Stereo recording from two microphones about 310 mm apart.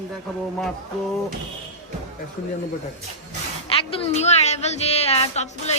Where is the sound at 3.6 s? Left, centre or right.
Centre.